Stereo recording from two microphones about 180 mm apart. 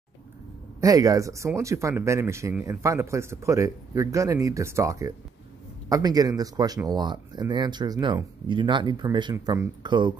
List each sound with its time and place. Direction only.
0.7 s speech: 20° right (ahead or behind)